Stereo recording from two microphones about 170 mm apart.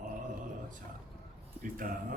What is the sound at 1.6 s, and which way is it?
Speech, 55° right (ahead or behind).